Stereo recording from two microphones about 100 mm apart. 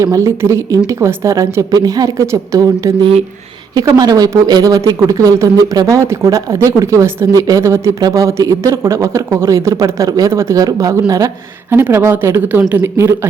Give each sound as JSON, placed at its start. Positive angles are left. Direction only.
{"t": 0.0, "sound": "speech", "side_deg": -30}
{"t": 3.8, "sound": "speech", "side_deg": -40}
{"t": 11.7, "sound": "speech", "side_deg": -20}